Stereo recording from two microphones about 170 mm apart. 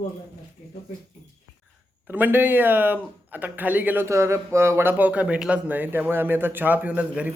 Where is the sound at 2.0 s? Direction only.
10° right (ahead or behind).